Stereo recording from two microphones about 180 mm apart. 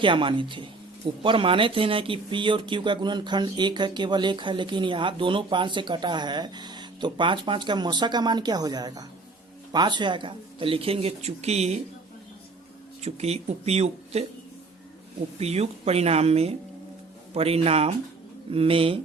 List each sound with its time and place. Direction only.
0.0 s speech: 30° right (ahead or behind)
13.0 s speech: 35° right (ahead or behind)
15.4 s speech: 35° right (ahead or behind)